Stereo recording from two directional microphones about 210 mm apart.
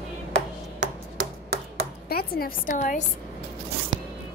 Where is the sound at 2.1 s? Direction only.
45° left (ahead or behind).